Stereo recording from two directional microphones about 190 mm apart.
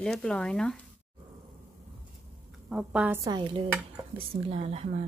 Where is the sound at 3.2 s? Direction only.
20° right (ahead or behind).